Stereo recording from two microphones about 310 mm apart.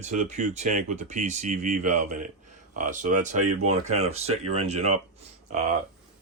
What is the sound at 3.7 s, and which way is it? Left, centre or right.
Speech, right.